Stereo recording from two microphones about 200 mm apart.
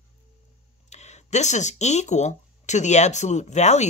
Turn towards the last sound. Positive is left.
turn(degrees=35)  # may be behind; listen again after turning